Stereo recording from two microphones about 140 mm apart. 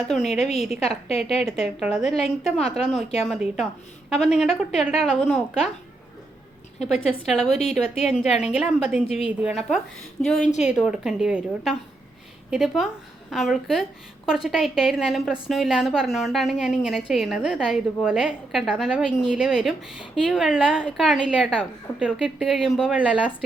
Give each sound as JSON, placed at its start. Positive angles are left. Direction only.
{"t": 0.2, "sound": "a woman's voice", "side_deg": 50}
{"t": 1.8, "sound": "a woman's voice", "side_deg": -5}
{"t": 7.1, "sound": "a woman's voice", "side_deg": 0}
{"t": 8.3, "sound": "a woman's voice", "side_deg": 50}
{"t": 8.5, "sound": "a woman's voice", "side_deg": -5}
{"t": 10.4, "sound": "a woman's voice", "side_deg": 55}
{"t": 10.7, "sound": "a woman's voice", "side_deg": -5}